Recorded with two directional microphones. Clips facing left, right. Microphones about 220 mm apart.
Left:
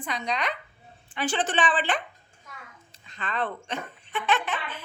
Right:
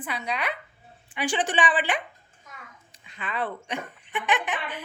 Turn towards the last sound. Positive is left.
turn(degrees=-15)  # may be behind; listen again after turning